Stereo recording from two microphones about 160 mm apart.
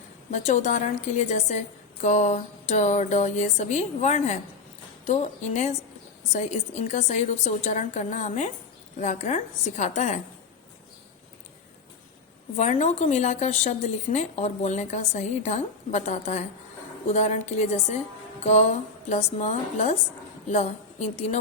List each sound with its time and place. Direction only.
0.3 s a woman's voice: 50° left (ahead or behind)
12.5 s a woman's voice: 45° left (ahead or behind)